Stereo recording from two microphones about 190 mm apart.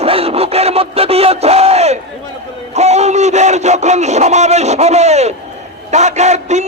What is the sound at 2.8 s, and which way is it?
A man's voice, 35° right (ahead or behind).